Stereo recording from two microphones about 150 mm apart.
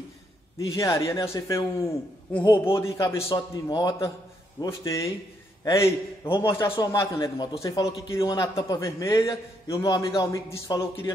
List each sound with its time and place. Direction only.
0.7 s a man's voice: 20° left (ahead or behind)